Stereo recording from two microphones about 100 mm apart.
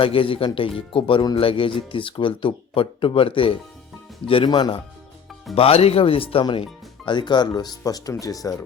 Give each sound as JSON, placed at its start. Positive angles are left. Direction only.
{"t": 0.0, "sound": "speech", "side_deg": 65}
{"t": 4.4, "sound": "speech", "side_deg": 45}
{"t": 5.5, "sound": "speech", "side_deg": 80}